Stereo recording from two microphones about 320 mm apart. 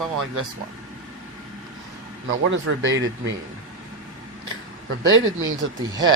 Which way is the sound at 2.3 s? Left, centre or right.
Right.